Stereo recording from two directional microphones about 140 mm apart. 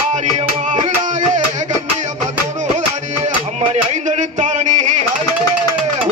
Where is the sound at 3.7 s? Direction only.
55° right (ahead or behind).